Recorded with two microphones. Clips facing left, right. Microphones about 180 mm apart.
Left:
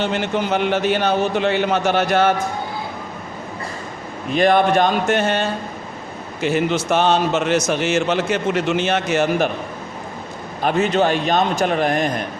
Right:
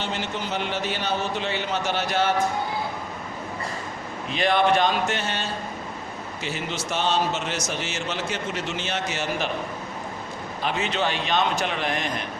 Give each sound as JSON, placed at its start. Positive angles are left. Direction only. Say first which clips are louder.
{"t": 0.0, "sound": "a man's voice", "louder": "left 9 dB", "side_deg": 55}
{"t": 4.3, "sound": "a man's voice", "louder": "left 6 dB", "side_deg": 50}
{"t": 10.6, "sound": "a man's voice", "louder": "left 9 dB", "side_deg": 45}